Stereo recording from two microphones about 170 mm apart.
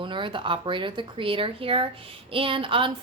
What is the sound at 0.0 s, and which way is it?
Speech, 30° right (ahead or behind).